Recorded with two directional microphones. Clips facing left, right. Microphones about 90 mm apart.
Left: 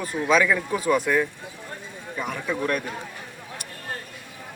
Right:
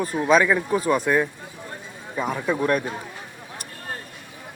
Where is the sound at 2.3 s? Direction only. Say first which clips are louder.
Right 4 dB; 30° right (ahead or behind).